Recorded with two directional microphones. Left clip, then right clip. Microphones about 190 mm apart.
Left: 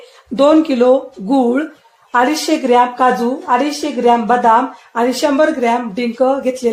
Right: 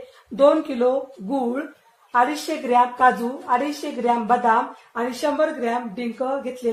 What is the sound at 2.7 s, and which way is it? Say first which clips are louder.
Speech: left 4 dB; 50° left (ahead or behind).